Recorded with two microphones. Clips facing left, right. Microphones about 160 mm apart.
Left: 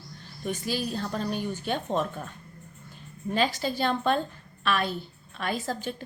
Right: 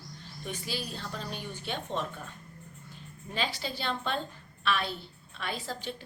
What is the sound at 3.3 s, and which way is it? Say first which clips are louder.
A woman's voice: left 7 dB; 45° left (ahead or behind).